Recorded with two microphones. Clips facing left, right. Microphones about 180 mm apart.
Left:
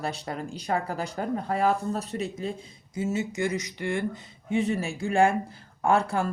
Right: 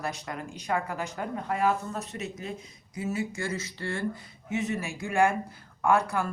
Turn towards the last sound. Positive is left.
turn(degrees=30)  # may be behind; listen again after turning